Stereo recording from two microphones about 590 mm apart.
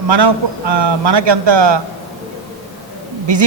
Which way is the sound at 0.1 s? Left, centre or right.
Right.